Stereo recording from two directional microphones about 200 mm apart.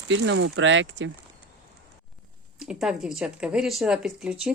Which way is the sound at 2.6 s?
5° right (ahead or behind).